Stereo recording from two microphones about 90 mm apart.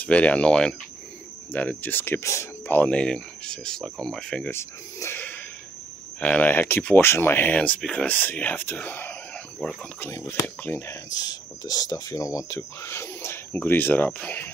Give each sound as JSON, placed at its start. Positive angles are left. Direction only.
{"t": 0.0, "sound": "speech", "side_deg": 15}
{"t": 2.7, "sound": "speech", "side_deg": 15}
{"t": 4.5, "sound": "speech", "side_deg": 30}
{"t": 9.9, "sound": "speech", "side_deg": 25}
{"t": 11.1, "sound": "speech", "side_deg": 45}